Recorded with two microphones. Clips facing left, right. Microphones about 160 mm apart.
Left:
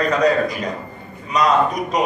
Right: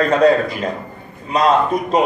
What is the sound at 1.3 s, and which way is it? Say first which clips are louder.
Speech: right 2 dB; 30° right (ahead or behind).